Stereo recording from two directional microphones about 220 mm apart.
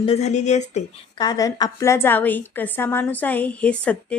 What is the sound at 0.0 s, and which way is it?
Speech, 30° left (ahead or behind).